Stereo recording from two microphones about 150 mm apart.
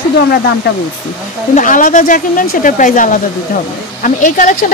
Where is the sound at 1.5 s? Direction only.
60° left (ahead or behind).